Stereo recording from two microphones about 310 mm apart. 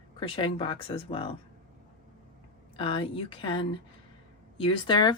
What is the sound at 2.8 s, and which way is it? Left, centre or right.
A woman's voice, centre.